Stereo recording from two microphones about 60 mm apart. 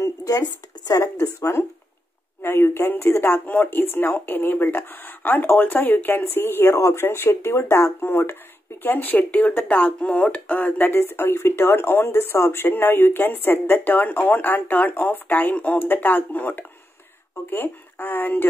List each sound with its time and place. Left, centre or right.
0.0 s speech: left
2.4 s speech: left
8.8 s speech: left
9.9 s speech: centre